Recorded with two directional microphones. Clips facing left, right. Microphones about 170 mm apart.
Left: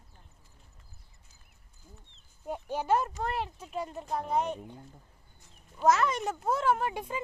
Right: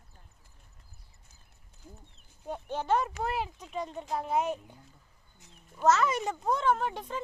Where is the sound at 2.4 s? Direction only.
10° left (ahead or behind).